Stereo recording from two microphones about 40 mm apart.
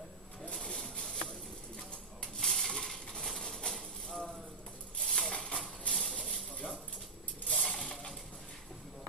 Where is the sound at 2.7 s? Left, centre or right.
Centre.